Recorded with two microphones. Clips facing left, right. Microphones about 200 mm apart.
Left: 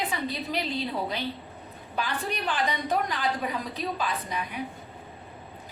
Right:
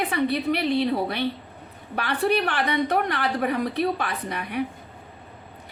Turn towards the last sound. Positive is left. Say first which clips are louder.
# right 5 dB
turn(degrees=-65)  # may be behind; listen again after turning